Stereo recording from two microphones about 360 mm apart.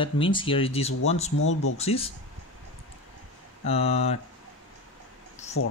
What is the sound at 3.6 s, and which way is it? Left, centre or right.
Speech, centre.